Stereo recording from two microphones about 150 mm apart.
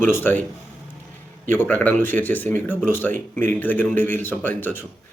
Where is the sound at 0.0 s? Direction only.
15° left (ahead or behind).